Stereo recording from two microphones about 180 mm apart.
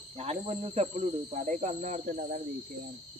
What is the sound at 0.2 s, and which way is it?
Speech, 35° right (ahead or behind).